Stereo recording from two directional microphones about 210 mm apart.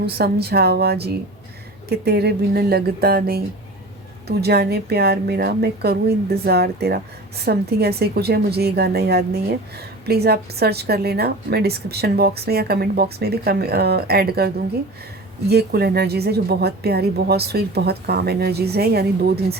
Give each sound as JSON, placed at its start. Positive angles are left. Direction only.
{"t": 0.0, "sound": "a woman's voice", "side_deg": -50}